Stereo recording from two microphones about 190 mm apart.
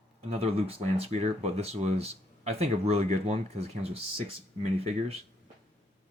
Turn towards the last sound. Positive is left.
turn(degrees=-30)  # may be behind; listen again after turning